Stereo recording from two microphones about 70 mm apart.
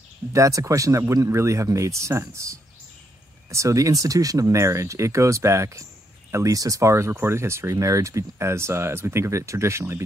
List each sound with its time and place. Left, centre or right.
0.3 s speech: right
6.3 s speech: right